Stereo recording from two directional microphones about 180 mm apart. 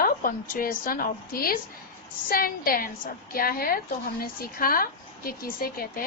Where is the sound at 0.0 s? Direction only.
50° left (ahead or behind).